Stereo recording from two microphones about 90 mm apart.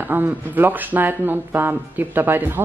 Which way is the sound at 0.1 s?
25° right (ahead or behind).